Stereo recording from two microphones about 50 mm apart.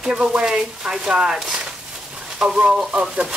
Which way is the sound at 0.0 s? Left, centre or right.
Centre.